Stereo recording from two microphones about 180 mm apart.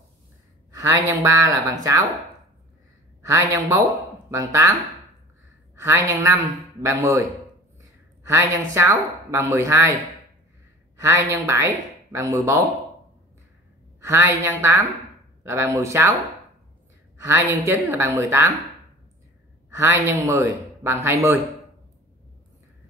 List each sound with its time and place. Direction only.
0.7 s speech: 20° right (ahead or behind)
3.2 s speech: 20° right (ahead or behind)
5.8 s speech: 15° right (ahead or behind)
11.0 s speech: 15° right (ahead or behind)
14.0 s speech: 15° right (ahead or behind)
17.2 s speech: 15° right (ahead or behind)
19.7 s speech: 15° right (ahead or behind)